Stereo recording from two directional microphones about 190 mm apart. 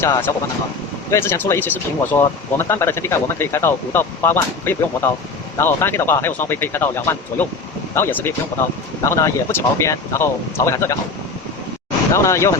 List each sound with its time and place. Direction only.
0.0 s speech: 15° left (ahead or behind)
12.1 s speech: 15° left (ahead or behind)